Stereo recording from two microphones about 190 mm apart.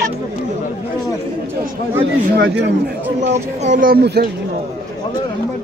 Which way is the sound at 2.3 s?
65° right (ahead or behind).